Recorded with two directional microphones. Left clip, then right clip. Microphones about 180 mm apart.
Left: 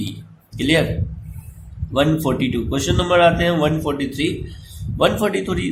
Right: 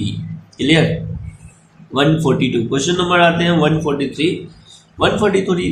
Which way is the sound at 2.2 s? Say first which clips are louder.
Right 5 dB; 35° left (ahead or behind).